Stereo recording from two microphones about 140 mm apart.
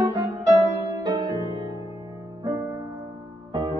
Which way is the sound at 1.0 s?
30° right (ahead or behind).